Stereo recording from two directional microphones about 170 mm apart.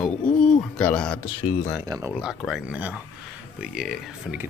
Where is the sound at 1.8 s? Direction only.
20° right (ahead or behind).